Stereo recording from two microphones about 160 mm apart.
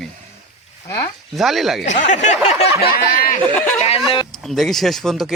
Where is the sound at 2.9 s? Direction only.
65° left (ahead or behind).